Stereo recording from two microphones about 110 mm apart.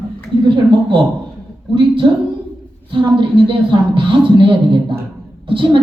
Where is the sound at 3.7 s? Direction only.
50° right (ahead or behind).